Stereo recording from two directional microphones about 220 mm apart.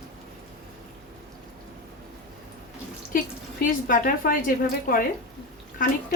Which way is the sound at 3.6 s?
40° left (ahead or behind).